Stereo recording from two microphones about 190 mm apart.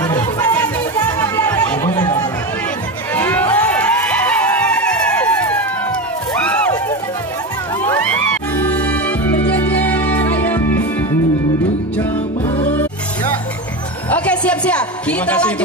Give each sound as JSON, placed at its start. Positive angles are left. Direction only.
{"t": 0.0, "sound": "chatter", "side_deg": 20}
{"t": 3.2, "sound": "music", "side_deg": 10}
{"t": 7.8, "sound": "music", "side_deg": 15}
{"t": 14.1, "sound": "a sound", "side_deg": 5}